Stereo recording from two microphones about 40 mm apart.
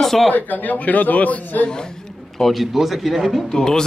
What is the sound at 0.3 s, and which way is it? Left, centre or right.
A man's voice, left.